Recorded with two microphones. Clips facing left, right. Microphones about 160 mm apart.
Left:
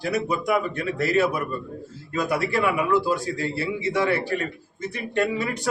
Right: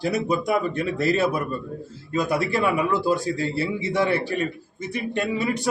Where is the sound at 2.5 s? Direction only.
30° right (ahead or behind).